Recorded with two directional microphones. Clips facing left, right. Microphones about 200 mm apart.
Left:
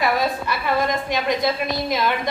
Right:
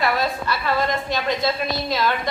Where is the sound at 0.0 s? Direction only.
15° left (ahead or behind).